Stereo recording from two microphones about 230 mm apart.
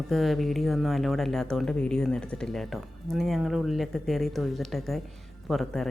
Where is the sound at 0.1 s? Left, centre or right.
Centre.